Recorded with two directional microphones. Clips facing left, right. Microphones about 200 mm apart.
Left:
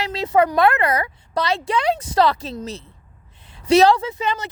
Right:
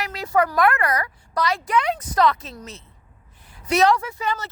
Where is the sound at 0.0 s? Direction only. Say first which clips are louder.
Left 4 dB; 25° left (ahead or behind).